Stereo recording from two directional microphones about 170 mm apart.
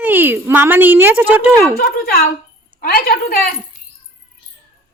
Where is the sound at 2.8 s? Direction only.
60° left (ahead or behind).